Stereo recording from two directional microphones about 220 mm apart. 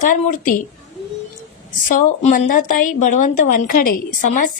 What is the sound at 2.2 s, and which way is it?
A woman's voice, 35° left (ahead or behind).